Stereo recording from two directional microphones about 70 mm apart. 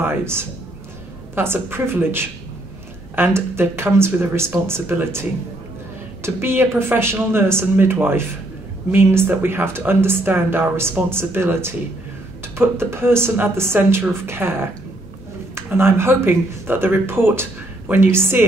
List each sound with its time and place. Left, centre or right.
0.0 s a man's voice: right
6.2 s speech: right